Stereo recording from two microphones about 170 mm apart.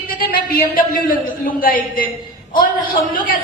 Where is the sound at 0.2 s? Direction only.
60° left (ahead or behind).